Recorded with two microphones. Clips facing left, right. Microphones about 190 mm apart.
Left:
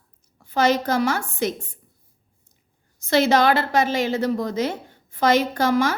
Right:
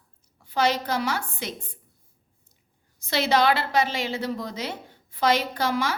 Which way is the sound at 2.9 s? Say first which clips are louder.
Left 5 dB; 45° left (ahead or behind).